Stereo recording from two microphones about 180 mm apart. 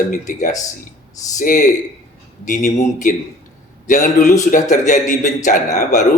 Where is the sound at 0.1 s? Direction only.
45° left (ahead or behind).